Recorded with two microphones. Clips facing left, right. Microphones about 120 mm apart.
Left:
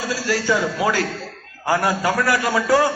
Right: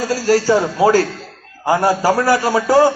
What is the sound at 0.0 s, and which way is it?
A man's voice, 45° right (ahead or behind).